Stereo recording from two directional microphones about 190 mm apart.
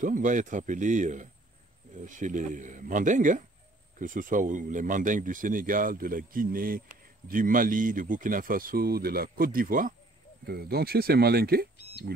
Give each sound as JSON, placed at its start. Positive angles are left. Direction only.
{"t": 0.0, "sound": "speech", "side_deg": -45}